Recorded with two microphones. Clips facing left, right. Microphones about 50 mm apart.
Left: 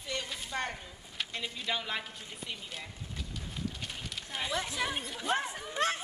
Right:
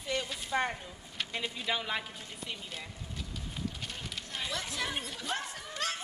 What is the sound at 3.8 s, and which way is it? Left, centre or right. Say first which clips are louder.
Fire: even; centre.